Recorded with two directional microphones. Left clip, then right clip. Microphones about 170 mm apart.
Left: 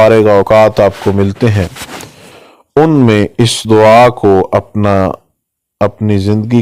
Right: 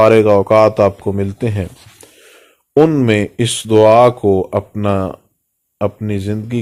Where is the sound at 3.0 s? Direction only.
45° left (ahead or behind).